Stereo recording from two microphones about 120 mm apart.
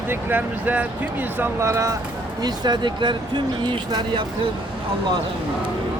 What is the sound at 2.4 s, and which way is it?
Speech, 35° right (ahead or behind).